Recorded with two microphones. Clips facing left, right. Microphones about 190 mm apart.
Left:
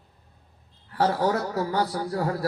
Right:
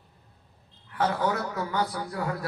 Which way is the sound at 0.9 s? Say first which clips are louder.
Left 3 dB; 35° left (ahead or behind).